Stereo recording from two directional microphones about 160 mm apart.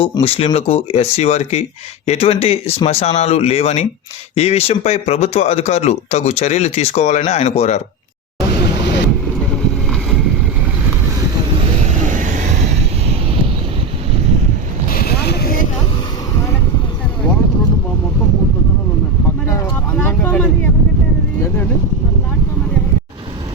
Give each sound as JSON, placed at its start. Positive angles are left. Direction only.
{"t": 0.0, "sound": "speech", "side_deg": 30}
{"t": 12.0, "sound": "vehicle", "side_deg": -50}
{"t": 14.9, "sound": "vehicle", "side_deg": 75}
{"t": 20.0, "sound": "vehicle", "side_deg": 10}